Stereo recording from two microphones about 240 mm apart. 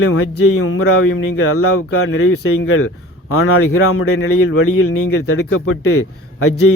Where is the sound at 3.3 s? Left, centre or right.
Left.